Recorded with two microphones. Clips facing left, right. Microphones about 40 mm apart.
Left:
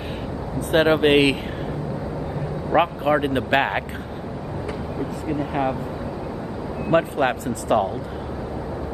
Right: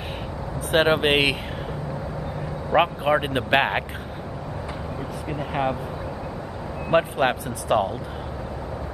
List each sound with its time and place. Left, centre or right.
0.6 s speech: centre
2.7 s speech: centre
5.3 s speech: centre
6.9 s speech: centre
7.4 s speech: centre